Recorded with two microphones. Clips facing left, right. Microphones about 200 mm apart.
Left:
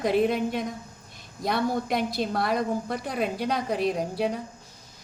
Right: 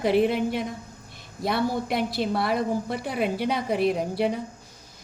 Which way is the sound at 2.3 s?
5° right (ahead or behind).